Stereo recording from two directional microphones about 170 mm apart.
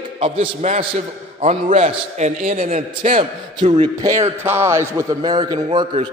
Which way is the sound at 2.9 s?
35° right (ahead or behind).